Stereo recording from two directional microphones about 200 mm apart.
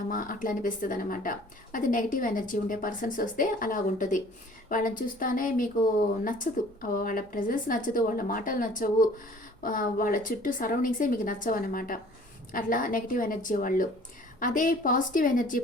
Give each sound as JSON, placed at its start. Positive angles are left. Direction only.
{"t": 0.1, "sound": "a woman's voice", "side_deg": 45}